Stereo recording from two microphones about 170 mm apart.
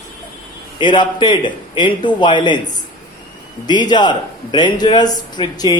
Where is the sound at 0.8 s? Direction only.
25° left (ahead or behind).